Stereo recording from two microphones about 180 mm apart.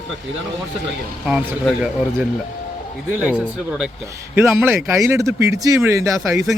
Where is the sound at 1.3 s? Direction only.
5° right (ahead or behind).